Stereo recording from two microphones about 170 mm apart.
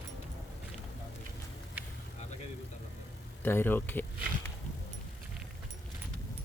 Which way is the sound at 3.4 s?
10° left (ahead or behind).